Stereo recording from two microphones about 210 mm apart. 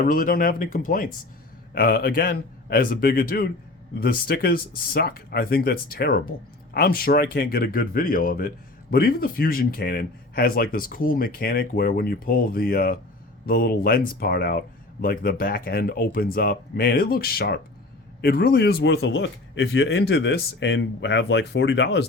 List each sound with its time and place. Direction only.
0.0 s speech: 40° left (ahead or behind)